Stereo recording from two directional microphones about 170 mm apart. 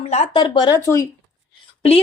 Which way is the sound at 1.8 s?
35° left (ahead or behind).